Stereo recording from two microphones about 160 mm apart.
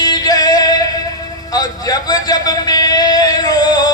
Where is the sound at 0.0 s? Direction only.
25° left (ahead or behind).